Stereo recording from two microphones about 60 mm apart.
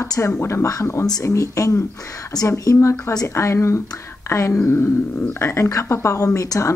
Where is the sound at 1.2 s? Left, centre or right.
Left.